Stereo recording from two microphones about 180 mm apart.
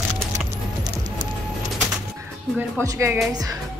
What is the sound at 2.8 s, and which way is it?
Speech, 15° right (ahead or behind).